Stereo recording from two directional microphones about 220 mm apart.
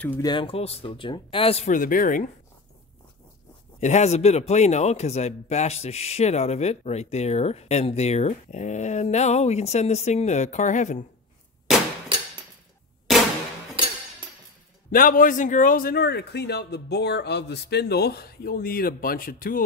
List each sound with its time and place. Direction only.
0.0 s a man's voice: 15° left (ahead or behind); by 2.3 s 40° left (ahead or behind)
3.8 s a man's voice: 30° left (ahead or behind)
14.9 s a man's voice: 40° left (ahead or behind)